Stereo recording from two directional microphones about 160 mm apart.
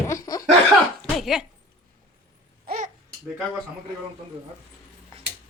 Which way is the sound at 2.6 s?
55° right (ahead or behind).